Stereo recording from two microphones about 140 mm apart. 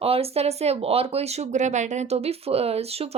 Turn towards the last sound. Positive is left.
turn(degrees=-45)  # may be behind; listen again after turning